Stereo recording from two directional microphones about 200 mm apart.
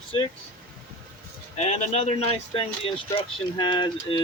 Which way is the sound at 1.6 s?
35° left (ahead or behind).